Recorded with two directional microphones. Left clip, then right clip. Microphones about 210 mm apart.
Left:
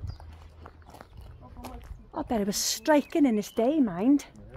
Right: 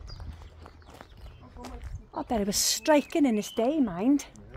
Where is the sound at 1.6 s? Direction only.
45° left (ahead or behind).